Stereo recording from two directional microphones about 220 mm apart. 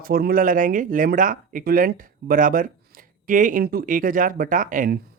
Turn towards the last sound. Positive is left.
turn(degrees=-40)  # may be behind; listen again after turning